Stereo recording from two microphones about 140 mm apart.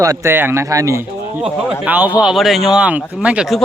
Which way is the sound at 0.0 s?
20° right (ahead or behind).